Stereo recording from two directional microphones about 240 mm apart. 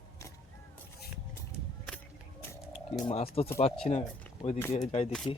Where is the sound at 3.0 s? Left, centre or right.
Left.